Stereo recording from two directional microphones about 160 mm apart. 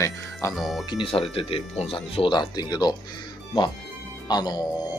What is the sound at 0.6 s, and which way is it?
Speech, centre (ahead or behind).